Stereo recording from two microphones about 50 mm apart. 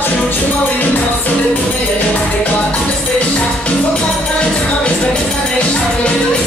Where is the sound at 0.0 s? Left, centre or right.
Left.